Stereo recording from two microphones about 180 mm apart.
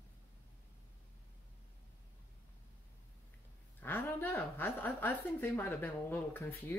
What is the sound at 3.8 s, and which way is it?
A woman's voice, 10° left (ahead or behind).